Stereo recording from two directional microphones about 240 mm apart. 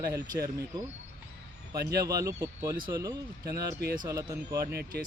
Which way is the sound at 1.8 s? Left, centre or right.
Right.